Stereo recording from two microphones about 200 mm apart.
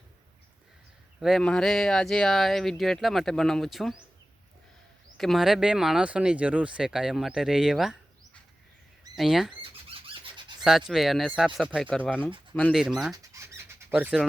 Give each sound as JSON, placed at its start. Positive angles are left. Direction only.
{"t": 1.2, "sound": "speech", "side_deg": 0}
{"t": 5.1, "sound": "speech", "side_deg": 0}
{"t": 9.6, "sound": "a sound", "side_deg": -25}
{"t": 10.6, "sound": "speech", "side_deg": 0}
{"t": 13.1, "sound": "squawk", "side_deg": -15}